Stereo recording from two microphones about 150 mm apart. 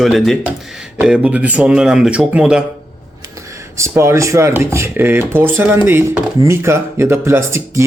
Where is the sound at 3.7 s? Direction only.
20° right (ahead or behind).